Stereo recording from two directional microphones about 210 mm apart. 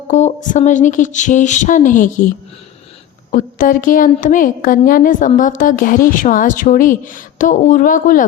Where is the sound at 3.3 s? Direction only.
40° left (ahead or behind).